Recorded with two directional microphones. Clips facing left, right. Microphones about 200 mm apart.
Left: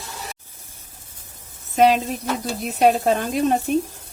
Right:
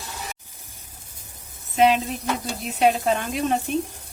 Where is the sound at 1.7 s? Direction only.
45° left (ahead or behind).